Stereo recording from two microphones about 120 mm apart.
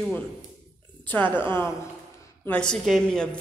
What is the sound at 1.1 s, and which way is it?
Speech, 15° left (ahead or behind).